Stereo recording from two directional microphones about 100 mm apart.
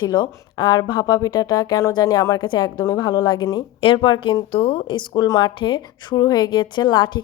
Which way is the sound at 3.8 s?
55° left (ahead or behind).